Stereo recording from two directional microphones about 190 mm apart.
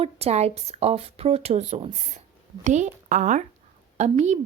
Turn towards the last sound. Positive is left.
turn(degrees=-40)  # may be behind; listen again after turning